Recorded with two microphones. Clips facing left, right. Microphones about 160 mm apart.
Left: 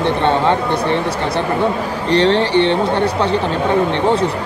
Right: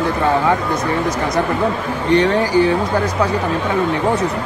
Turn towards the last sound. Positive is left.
turn(degrees=30)  # may be behind; listen again after turning